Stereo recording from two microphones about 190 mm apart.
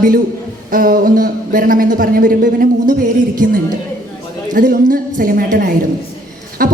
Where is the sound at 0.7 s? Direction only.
50° right (ahead or behind).